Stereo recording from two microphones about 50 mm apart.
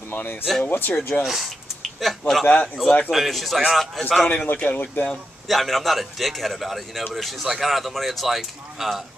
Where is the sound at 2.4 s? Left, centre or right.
Left.